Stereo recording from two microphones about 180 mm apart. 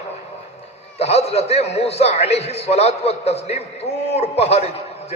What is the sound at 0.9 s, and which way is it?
A man's voice, 35° left (ahead or behind).